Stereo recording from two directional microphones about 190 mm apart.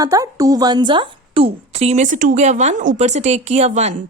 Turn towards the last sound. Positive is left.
turn(degrees=-35)  # may be behind; listen again after turning